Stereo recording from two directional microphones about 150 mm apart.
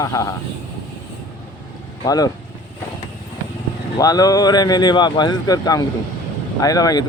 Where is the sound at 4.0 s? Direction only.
25° left (ahead or behind).